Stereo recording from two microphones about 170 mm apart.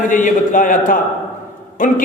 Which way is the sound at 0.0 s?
50° left (ahead or behind).